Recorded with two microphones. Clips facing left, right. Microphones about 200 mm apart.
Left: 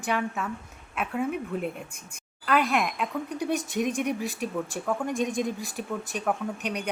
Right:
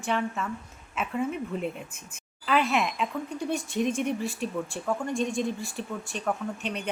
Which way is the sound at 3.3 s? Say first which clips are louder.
Left 1 dB; 15° left (ahead or behind).